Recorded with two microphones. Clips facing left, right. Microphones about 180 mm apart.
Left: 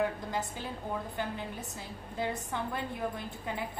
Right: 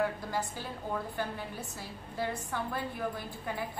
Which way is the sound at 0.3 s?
20° left (ahead or behind).